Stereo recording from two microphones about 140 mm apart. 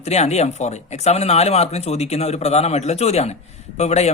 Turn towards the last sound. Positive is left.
turn(degrees=50)  # may be behind; listen again after turning